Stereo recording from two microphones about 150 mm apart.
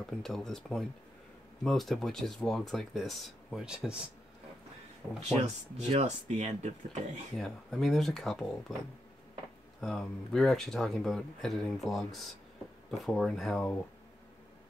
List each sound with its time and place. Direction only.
0.2 s speech: 5° left (ahead or behind)
5.2 s speech: 45° right (ahead or behind)
7.3 s speech: centre (ahead or behind)
9.8 s speech: centre (ahead or behind)